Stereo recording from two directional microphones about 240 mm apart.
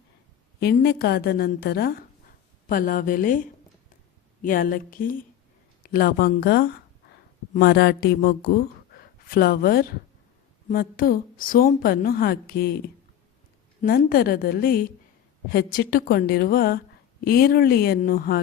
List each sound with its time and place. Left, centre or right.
0.6 s a woman's voice: left
4.4 s a woman's voice: left